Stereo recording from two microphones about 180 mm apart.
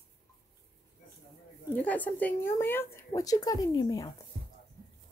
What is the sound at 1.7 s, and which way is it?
Speech, 10° left (ahead or behind).